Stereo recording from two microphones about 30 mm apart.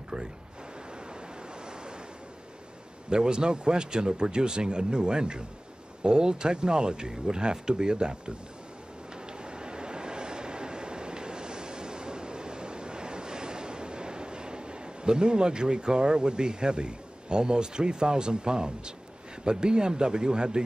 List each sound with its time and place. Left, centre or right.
0.1 s speech: right
3.1 s speech: right
9.1 s train: right
19.4 s speech: right